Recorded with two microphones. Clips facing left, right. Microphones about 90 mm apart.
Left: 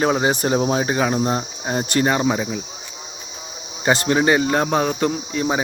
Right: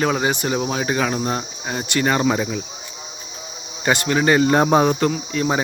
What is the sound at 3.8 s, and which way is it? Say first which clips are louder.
Speech: left 1 dB; 30° left (ahead or behind).